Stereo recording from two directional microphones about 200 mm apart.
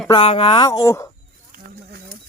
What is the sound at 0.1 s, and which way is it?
Speech, 25° left (ahead or behind).